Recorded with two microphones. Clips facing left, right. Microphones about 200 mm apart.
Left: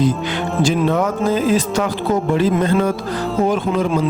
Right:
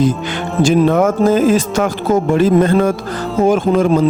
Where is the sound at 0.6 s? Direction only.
45° right (ahead or behind).